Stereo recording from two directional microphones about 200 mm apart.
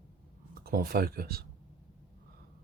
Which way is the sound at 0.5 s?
50° right (ahead or behind).